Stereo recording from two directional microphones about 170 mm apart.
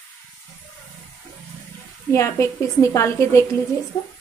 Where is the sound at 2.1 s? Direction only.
15° left (ahead or behind).